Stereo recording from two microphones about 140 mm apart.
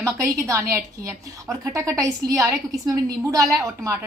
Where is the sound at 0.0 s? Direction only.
20° right (ahead or behind).